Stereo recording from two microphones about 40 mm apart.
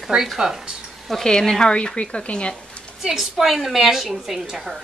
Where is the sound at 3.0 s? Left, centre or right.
Centre.